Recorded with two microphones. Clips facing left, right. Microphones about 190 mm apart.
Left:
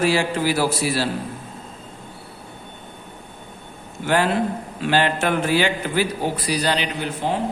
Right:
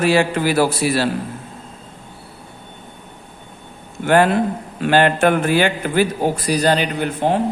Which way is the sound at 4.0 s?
55° right (ahead or behind).